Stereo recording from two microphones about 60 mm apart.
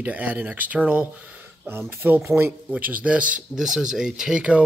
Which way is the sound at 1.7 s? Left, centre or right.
Right.